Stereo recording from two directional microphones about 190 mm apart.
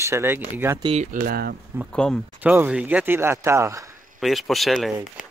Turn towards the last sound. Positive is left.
turn(degrees=0)  # may be behind; listen again after turning